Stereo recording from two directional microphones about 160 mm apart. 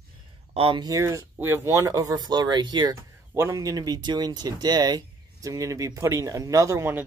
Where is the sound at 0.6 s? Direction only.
30° right (ahead or behind).